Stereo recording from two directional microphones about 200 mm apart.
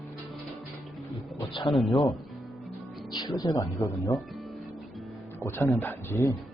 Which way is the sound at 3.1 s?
20° left (ahead or behind).